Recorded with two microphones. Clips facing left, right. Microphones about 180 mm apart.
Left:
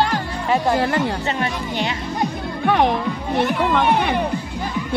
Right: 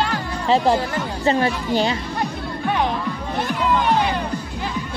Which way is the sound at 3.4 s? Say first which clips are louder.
Left 2 dB; 65° left (ahead or behind).